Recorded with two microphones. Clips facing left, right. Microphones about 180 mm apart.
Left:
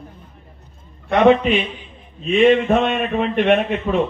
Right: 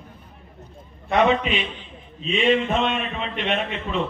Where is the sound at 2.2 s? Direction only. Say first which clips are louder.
Left 6 dB; 50° left (ahead or behind).